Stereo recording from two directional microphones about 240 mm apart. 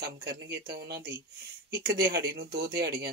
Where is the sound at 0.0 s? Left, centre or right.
Right.